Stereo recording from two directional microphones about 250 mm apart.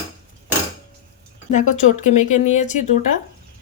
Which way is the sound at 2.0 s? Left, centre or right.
Left.